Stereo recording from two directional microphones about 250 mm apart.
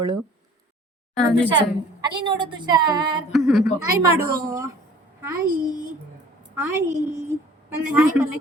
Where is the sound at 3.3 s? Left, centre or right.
Centre.